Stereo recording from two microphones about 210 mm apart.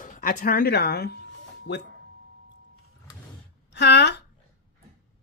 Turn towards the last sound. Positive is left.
turn(degrees=55)  # may be behind; listen again after turning